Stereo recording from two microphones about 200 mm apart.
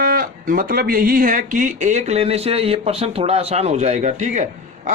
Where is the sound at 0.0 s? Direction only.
45° right (ahead or behind).